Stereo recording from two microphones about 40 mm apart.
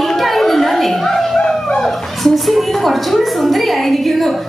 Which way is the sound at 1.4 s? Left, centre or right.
Centre.